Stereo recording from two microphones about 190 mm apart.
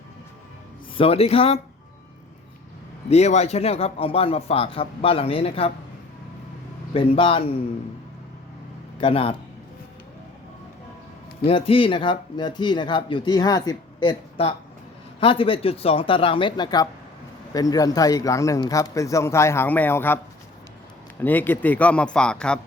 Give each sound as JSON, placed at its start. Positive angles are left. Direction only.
{"t": 0.9, "sound": "a man's voice", "side_deg": 30}
{"t": 3.1, "sound": "a man's voice", "side_deg": 35}
{"t": 6.9, "sound": "speech", "side_deg": 30}
{"t": 9.0, "sound": "speech", "side_deg": 30}
{"t": 11.4, "sound": "speech", "side_deg": 30}
{"t": 21.2, "sound": "speech", "side_deg": 10}